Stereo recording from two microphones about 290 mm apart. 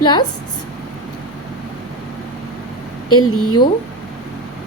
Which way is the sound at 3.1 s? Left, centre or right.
Left.